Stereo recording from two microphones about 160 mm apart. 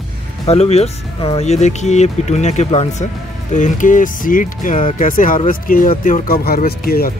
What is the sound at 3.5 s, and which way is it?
Speech, 50° left (ahead or behind).